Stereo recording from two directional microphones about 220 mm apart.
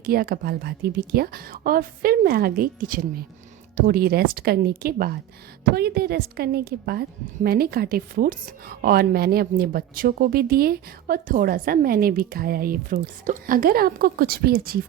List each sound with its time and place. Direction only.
0.0 s a woman's voice: 40° right (ahead or behind)